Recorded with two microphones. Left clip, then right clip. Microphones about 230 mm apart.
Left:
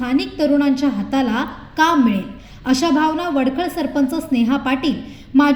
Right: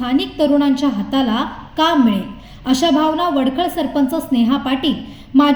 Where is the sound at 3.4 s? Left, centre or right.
Left.